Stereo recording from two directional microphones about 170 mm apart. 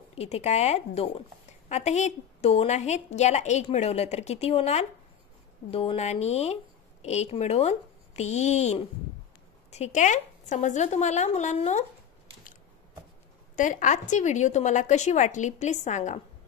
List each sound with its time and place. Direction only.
0.1 s a woman's voice: 40° left (ahead or behind)
13.6 s a woman's voice: 50° left (ahead or behind)